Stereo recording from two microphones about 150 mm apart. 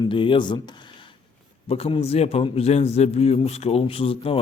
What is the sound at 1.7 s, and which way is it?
A man's voice, 40° left (ahead or behind).